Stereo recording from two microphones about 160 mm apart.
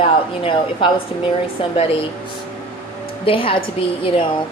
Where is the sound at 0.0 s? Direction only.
35° left (ahead or behind).